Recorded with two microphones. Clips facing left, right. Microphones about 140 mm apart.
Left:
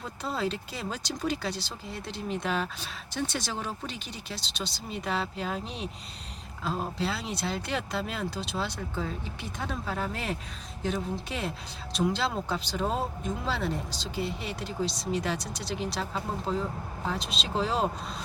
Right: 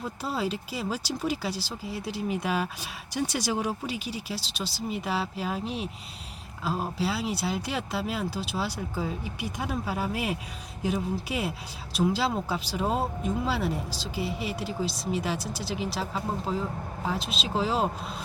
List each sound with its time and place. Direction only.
0.0 s speech: 5° right (ahead or behind)